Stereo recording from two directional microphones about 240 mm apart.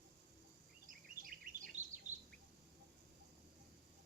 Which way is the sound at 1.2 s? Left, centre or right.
Right.